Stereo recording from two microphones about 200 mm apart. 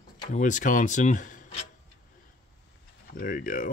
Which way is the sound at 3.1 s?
45° left (ahead or behind).